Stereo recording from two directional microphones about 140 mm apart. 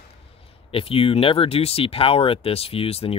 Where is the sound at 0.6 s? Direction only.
45° left (ahead or behind).